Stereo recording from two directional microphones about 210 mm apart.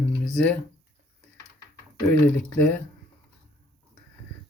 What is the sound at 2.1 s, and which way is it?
Speech, 5° left (ahead or behind).